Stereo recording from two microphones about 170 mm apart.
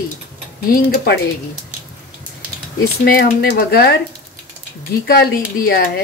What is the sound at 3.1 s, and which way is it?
Speech, 65° left (ahead or behind).